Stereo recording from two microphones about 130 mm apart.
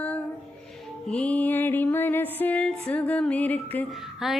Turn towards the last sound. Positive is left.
turn(degrees=-5)  # may be behind; listen again after turning